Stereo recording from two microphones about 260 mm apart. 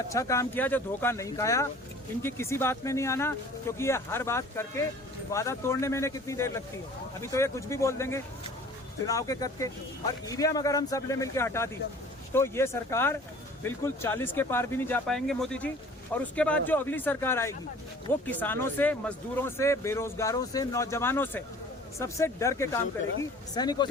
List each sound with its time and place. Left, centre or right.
0.1 s speech: centre